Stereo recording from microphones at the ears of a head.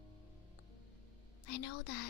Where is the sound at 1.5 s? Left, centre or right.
Left.